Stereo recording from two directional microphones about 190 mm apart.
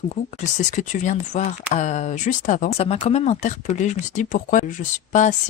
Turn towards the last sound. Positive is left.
turn(degrees=40)  # may be behind; listen again after turning